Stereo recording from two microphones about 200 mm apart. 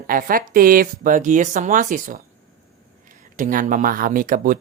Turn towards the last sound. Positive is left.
turn(degrees=-40)  # may be behind; listen again after turning